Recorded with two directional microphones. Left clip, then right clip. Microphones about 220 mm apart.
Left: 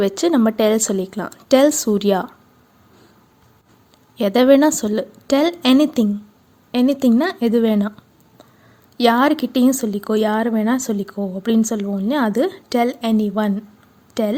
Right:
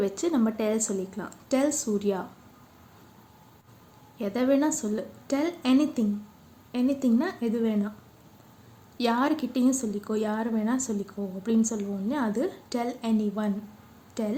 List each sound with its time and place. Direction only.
0.0 s speech: 40° left (ahead or behind)
4.2 s speech: 45° left (ahead or behind)
9.0 s a woman's voice: 40° left (ahead or behind)